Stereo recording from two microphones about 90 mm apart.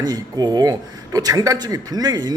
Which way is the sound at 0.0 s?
50° right (ahead or behind).